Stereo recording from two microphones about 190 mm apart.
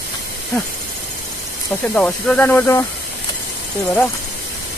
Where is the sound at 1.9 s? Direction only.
5° left (ahead or behind).